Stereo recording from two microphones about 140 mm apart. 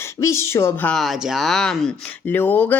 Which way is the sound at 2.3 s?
15° left (ahead or behind).